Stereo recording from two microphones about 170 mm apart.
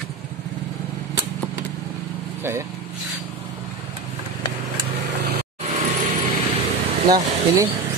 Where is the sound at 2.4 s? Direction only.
15° right (ahead or behind).